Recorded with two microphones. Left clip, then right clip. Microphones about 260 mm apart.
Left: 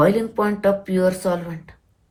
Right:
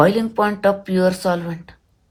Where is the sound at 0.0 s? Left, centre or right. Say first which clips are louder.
Right 2 dB; centre.